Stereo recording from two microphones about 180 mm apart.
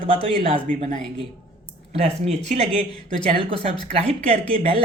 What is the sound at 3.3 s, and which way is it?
Speech, 30° right (ahead or behind).